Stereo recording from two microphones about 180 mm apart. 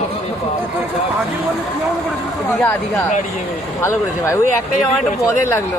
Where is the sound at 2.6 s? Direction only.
10° left (ahead or behind).